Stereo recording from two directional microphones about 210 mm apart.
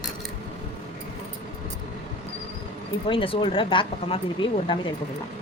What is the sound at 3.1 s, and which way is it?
Speech, 25° left (ahead or behind).